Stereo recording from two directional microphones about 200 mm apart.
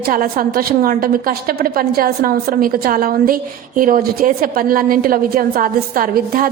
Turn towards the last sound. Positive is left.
turn(degrees=-45)  # may be behind; listen again after turning